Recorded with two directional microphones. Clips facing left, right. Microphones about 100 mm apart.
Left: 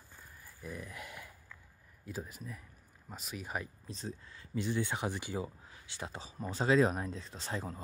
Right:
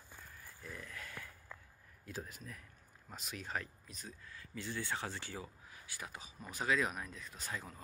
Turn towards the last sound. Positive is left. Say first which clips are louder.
# left 6 dB
turn(degrees=30)  # may be behind; listen again after turning